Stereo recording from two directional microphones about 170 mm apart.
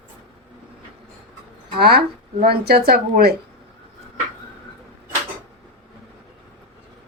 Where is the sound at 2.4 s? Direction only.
65° right (ahead or behind).